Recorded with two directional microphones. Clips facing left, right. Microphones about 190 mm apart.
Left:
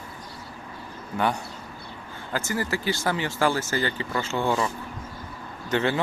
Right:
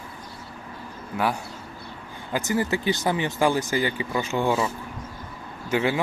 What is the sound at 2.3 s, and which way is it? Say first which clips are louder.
Speech: right 3 dB; 15° right (ahead or behind).